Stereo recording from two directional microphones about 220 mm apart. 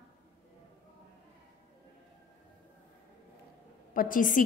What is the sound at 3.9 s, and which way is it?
Speech, 40° left (ahead or behind).